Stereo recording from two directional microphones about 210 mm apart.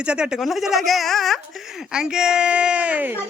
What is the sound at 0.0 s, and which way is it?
Speech, 5° right (ahead or behind).